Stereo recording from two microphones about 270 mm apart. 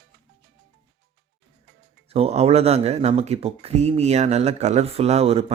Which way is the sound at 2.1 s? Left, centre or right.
Right.